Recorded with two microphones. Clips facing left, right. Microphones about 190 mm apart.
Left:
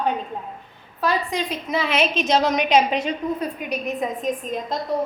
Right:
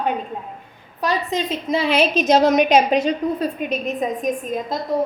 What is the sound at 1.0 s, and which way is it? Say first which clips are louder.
A woman's voice: right 1 dB; 20° right (ahead or behind).